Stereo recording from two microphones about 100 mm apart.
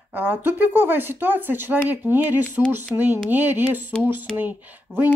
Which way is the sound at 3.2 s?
20° right (ahead or behind).